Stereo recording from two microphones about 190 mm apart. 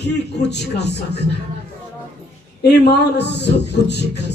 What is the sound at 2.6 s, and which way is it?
A man's voice, 60° left (ahead or behind).